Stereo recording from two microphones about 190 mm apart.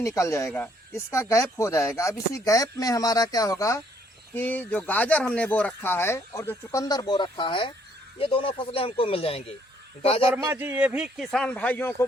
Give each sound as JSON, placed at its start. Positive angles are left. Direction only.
{"t": 0.0, "sound": "a man's voice", "side_deg": 15}
{"t": 10.3, "sound": "speech", "side_deg": -10}